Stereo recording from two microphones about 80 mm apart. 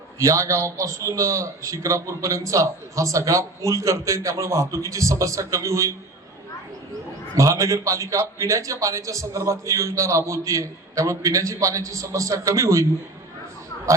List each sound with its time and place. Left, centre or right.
0.2 s a man's voice: right
7.3 s a man's voice: right